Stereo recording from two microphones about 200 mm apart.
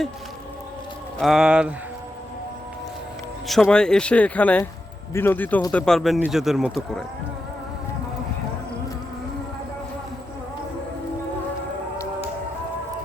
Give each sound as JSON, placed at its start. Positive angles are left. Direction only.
{"t": 1.2, "sound": "speech", "side_deg": 0}
{"t": 3.4, "sound": "speech", "side_deg": 0}